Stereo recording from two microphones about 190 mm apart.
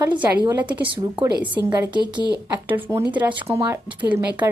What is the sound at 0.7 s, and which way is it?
Speech, 25° right (ahead or behind).